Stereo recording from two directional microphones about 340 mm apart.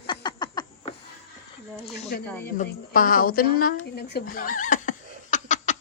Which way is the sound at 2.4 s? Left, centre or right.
Left.